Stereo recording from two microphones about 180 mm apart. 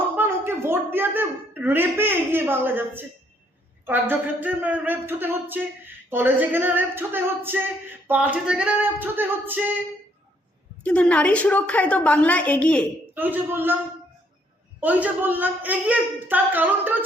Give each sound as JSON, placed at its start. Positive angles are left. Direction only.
{"t": 0.2, "sound": "a woman's voice", "side_deg": -15}
{"t": 10.8, "sound": "a woman's voice", "side_deg": 5}
{"t": 13.1, "sound": "a woman's voice", "side_deg": -10}
{"t": 14.8, "sound": "a woman's voice", "side_deg": -10}